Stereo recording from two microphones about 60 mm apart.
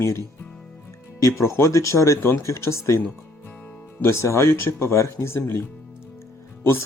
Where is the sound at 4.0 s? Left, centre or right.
Left.